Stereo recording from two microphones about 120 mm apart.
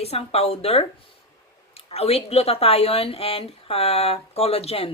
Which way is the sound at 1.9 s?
55° left (ahead or behind).